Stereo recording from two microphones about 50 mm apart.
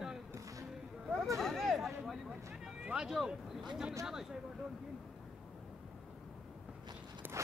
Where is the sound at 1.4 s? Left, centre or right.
Centre.